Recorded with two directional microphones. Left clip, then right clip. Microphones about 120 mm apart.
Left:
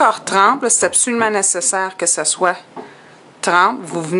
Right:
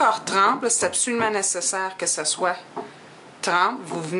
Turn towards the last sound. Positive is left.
turn(degrees=25)  # may be behind; listen again after turning